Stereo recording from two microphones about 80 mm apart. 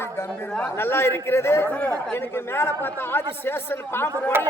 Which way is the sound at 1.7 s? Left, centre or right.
Centre.